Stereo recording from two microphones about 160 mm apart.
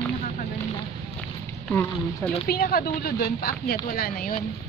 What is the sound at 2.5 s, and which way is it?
Speech, 70° left (ahead or behind).